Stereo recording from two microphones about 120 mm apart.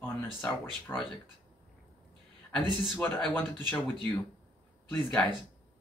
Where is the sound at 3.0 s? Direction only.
15° left (ahead or behind).